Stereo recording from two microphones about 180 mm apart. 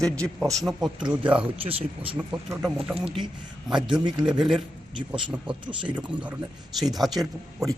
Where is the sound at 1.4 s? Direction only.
30° right (ahead or behind).